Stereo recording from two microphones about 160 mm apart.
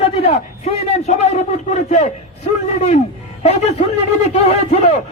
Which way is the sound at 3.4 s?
45° left (ahead or behind).